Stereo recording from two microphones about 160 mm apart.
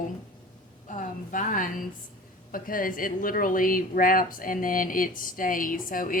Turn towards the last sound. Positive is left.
turn(degrees=60)  # may be behind; listen again after turning